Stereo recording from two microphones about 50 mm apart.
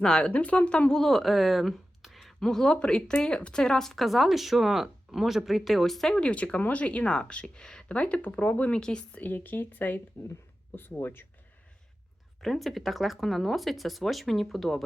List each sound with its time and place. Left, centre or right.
0.0 s speech: left
0.9 s speech: centre
2.4 s speech: centre
6.1 s speech: left
7.9 s speech: left
8.8 s a woman's voice: centre
9.1 s speech: left
10.2 s speech: left
12.4 s speech: centre